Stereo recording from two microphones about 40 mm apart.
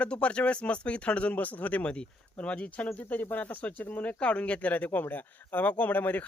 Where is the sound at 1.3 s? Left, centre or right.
Left.